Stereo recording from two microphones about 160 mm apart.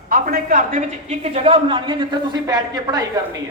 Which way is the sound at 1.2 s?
40° right (ahead or behind).